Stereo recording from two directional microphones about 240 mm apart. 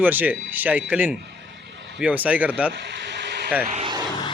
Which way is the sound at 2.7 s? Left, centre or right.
Right.